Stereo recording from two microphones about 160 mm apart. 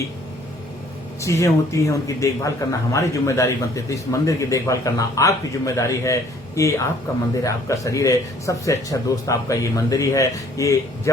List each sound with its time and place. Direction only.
1.2 s a man's voice: 20° left (ahead or behind)